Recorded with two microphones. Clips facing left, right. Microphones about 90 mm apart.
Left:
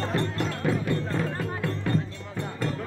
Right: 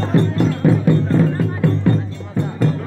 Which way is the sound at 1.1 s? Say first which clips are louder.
Right 11 dB; 35° right (ahead or behind).